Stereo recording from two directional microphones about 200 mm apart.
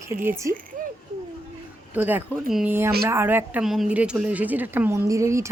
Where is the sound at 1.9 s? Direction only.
10° right (ahead or behind).